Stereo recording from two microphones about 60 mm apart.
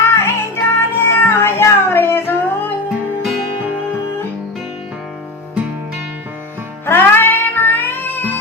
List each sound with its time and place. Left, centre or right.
0.0 s music: left
6.8 s music: left